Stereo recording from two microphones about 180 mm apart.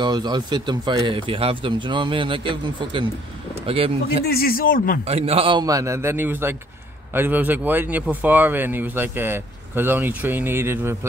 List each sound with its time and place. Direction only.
0.0 s speech: 25° right (ahead or behind)
4.3 s speech: 55° left (ahead or behind)
5.0 s speech: 35° right (ahead or behind); by 11.0 s 15° right (ahead or behind)